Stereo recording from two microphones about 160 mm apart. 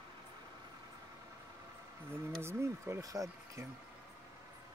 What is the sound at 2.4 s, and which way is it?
Speech, 15° right (ahead or behind).